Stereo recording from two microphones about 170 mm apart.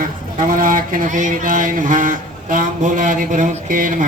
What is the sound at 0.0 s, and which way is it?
Speech, 55° right (ahead or behind).